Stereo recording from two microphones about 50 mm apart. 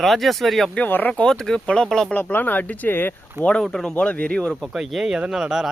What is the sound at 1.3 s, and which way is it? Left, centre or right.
Speech, centre.